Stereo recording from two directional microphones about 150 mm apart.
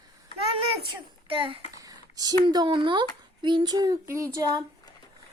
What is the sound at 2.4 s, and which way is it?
Speech, 30° right (ahead or behind).